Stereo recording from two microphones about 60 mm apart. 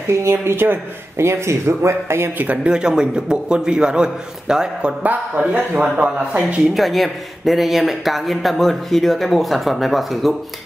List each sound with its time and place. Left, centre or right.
0.1 s speech: right
2.3 s speech: right
2.7 s a man's voice: centre
5.0 s speech: right
6.7 s speech: centre